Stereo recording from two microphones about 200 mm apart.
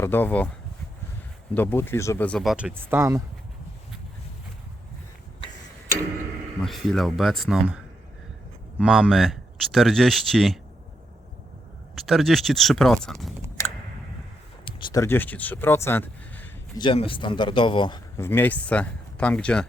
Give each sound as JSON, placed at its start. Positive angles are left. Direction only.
{"t": 0.0, "sound": "speech", "side_deg": 10}
{"t": 1.5, "sound": "speech", "side_deg": 10}
{"t": 6.6, "sound": "speech", "side_deg": 0}
{"t": 8.8, "sound": "speech", "side_deg": 0}
{"t": 11.9, "sound": "speech", "side_deg": 0}
{"t": 14.6, "sound": "a sound", "side_deg": 25}
{"t": 15.0, "sound": "speech", "side_deg": 10}
{"t": 16.7, "sound": "speech", "side_deg": 25}
{"t": 18.2, "sound": "speech", "side_deg": 10}